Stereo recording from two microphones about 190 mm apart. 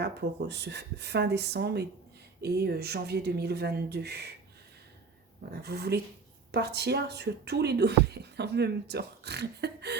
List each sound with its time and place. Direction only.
0.0 s speech: 60° right (ahead or behind)
5.5 s speech: 60° right (ahead or behind)